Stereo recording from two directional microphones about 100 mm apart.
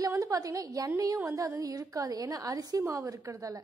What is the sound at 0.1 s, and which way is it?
A woman's voice, 35° right (ahead or behind).